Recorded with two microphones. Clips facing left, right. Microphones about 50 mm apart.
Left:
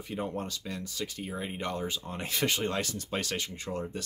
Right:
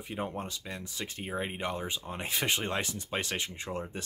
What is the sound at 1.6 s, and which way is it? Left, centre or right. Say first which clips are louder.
Speech: left 1 dB; centre.